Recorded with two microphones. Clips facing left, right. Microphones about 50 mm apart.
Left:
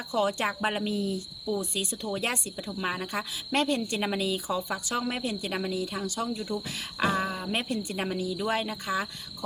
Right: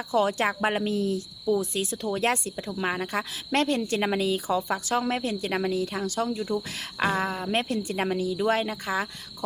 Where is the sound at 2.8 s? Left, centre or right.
Right.